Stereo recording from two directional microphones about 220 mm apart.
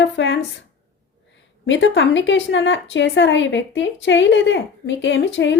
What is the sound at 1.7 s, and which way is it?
A woman's voice, 55° left (ahead or behind).